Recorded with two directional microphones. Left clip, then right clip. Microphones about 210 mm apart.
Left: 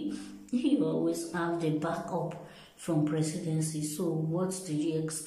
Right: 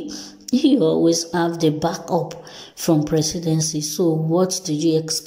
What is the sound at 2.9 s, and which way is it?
Music, 20° right (ahead or behind).